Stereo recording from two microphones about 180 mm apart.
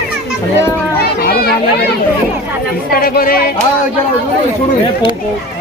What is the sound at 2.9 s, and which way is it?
Speech, 50° left (ahead or behind).